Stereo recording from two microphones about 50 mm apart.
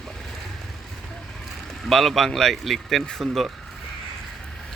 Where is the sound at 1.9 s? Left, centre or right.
Centre.